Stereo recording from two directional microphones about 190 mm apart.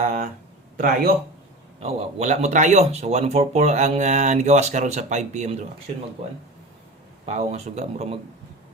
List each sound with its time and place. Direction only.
0.0 s speech: 40° right (ahead or behind)
0.8 s speech: 50° right (ahead or behind)
1.8 s speech: 35° right (ahead or behind)
7.3 s speech: 35° right (ahead or behind)